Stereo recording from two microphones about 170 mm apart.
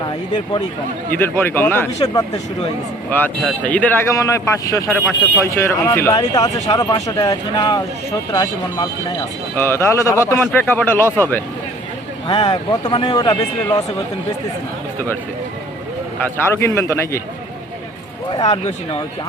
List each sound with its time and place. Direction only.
1.1 s speech: 10° left (ahead or behind)
3.1 s speech: 10° left (ahead or behind)
12.3 s speech: 25° left (ahead or behind)
16.5 s speech: 15° left (ahead or behind)
18.5 s speech: 30° left (ahead or behind)